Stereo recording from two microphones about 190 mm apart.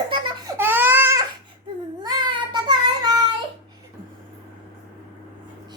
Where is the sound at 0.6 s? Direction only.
10° right (ahead or behind).